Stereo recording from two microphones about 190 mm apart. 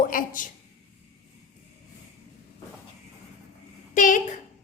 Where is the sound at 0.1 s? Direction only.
45° left (ahead or behind).